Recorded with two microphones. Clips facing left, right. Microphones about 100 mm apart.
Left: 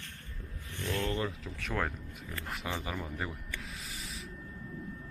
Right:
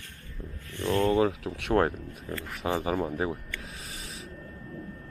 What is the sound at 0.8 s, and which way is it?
Speech, 55° right (ahead or behind).